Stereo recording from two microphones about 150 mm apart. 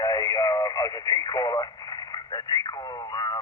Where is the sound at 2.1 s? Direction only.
25° left (ahead or behind).